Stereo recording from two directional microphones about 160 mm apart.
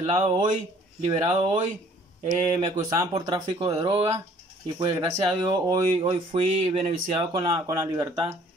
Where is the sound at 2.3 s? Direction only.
20° right (ahead or behind).